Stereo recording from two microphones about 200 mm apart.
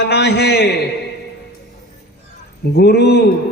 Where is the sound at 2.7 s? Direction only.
55° left (ahead or behind).